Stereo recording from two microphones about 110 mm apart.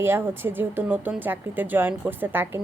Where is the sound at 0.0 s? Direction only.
20° right (ahead or behind).